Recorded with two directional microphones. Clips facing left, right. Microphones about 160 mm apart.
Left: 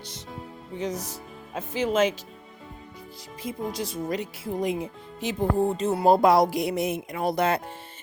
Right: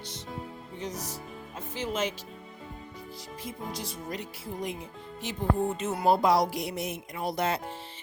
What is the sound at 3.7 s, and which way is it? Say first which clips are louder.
Speech: left 8 dB; 90° left.